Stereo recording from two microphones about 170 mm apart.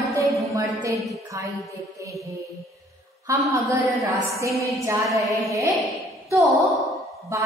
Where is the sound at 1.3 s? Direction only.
20° right (ahead or behind).